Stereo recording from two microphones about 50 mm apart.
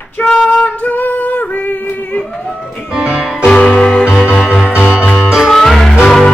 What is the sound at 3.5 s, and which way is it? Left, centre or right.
Music, centre.